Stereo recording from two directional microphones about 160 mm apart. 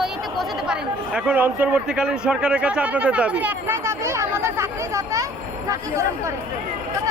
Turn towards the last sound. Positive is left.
turn(degrees=-20)  # may be behind; listen again after turning